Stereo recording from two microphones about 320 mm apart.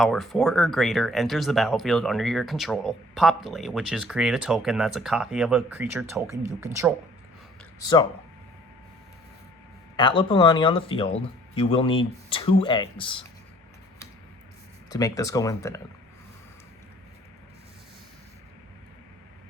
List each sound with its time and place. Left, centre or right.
0.0 s speech: centre
7.8 s speech: centre
10.0 s speech: centre
14.8 s speech: centre